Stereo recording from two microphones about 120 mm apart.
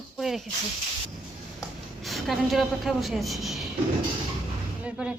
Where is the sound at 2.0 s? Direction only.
Centre (ahead or behind).